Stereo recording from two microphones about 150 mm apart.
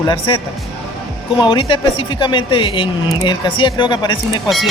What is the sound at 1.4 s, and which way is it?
Speech, 35° left (ahead or behind).